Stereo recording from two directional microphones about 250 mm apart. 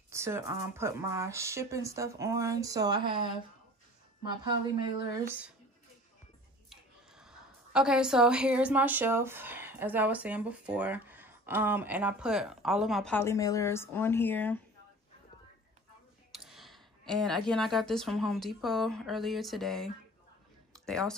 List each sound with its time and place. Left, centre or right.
0.1 s speech: centre
4.2 s speech: centre
6.7 s a woman's voice: centre
16.3 s speech: centre
20.7 s a sound: centre